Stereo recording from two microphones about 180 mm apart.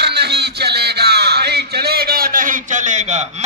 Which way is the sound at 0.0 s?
65° right (ahead or behind).